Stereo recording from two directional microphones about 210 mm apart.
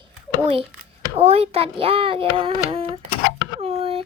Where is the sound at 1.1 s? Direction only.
30° right (ahead or behind).